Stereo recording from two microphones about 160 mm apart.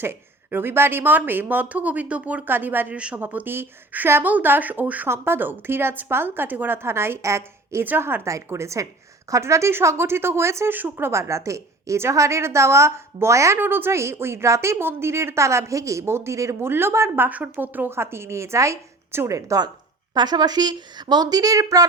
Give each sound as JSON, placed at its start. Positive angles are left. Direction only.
{"t": 0.0, "sound": "speech", "side_deg": -15}